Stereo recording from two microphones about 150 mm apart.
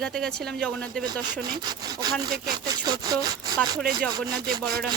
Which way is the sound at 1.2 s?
30° right (ahead or behind).